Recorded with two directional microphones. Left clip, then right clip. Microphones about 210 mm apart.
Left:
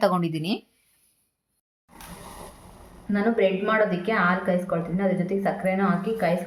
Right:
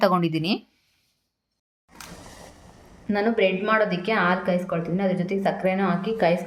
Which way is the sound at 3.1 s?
30° right (ahead or behind).